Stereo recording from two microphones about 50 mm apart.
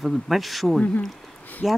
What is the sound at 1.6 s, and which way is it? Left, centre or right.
Speech, centre.